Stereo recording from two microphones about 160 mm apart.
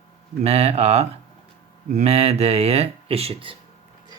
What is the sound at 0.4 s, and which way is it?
Speech, 40° right (ahead or behind).